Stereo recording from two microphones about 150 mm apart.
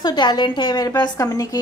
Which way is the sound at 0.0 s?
30° left (ahead or behind).